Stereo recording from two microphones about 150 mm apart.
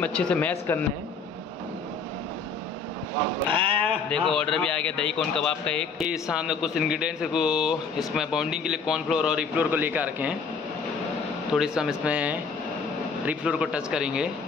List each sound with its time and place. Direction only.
0.0 s speech: 10° left (ahead or behind)
3.4 s a sound: 35° right (ahead or behind)
4.1 s speech: 5° left (ahead or behind)
6.0 s speech: 5° right (ahead or behind)
11.5 s speech: 5° right (ahead or behind)